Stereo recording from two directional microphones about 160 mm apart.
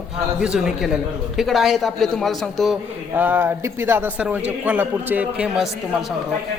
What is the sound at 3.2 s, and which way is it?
A man's voice, 15° right (ahead or behind).